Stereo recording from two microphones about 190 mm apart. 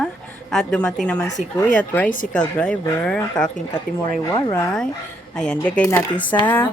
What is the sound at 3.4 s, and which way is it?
Speech, 5° left (ahead or behind).